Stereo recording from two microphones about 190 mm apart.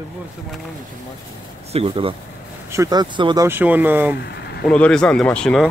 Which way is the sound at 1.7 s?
30° right (ahead or behind).